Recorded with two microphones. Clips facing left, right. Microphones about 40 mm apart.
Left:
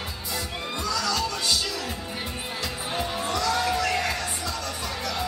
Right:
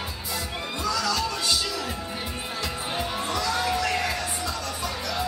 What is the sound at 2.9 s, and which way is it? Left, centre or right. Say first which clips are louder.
Music: left 1 dB; centre.